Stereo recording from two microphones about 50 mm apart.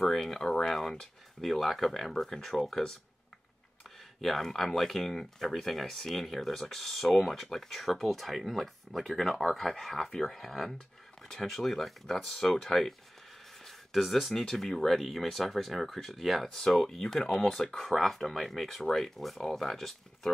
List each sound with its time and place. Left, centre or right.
0.0 s speech: centre
4.2 s speech: centre
13.7 s a sound: centre
14.4 s speech: centre